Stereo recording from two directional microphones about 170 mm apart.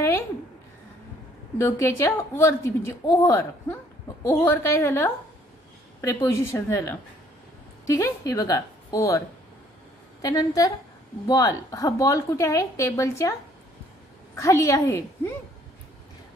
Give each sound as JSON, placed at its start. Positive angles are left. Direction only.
{"t": 1.6, "sound": "a woman's voice", "side_deg": 15}
{"t": 6.2, "sound": "a woman's voice", "side_deg": 15}
{"t": 10.2, "sound": "a woman's voice", "side_deg": 20}
{"t": 14.3, "sound": "a woman's voice", "side_deg": 15}